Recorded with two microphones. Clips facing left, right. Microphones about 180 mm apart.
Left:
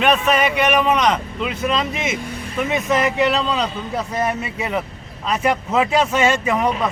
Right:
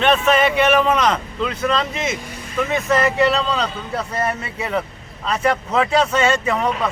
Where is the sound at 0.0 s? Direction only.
10° left (ahead or behind).